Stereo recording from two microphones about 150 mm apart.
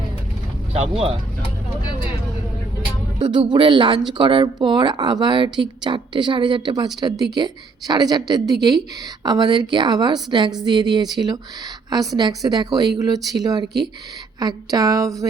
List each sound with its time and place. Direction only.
0.7 s speech: 40° right (ahead or behind)
3.2 s a woman's voice: 30° right (ahead or behind)